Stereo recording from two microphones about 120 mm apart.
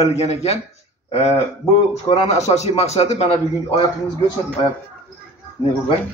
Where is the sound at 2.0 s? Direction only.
50° left (ahead or behind).